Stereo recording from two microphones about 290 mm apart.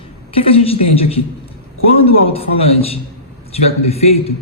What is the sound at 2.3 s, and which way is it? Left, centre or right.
A man's voice, centre.